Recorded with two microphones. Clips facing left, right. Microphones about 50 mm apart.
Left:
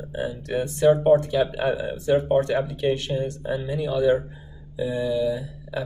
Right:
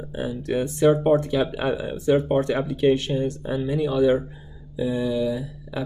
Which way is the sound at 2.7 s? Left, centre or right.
Right.